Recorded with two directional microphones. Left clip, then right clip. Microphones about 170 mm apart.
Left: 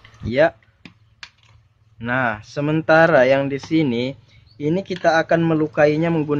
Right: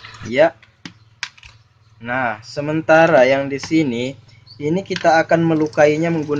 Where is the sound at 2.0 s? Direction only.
20° left (ahead or behind).